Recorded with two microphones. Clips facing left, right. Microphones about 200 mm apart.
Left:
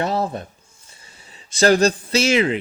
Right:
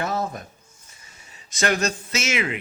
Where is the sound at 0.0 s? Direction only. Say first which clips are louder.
Left 4 dB; 30° left (ahead or behind).